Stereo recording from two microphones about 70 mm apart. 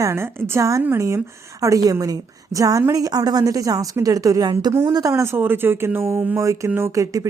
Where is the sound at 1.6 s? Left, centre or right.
Right.